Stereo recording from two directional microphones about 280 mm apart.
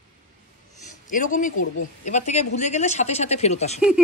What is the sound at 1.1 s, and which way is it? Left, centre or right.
Speech, left.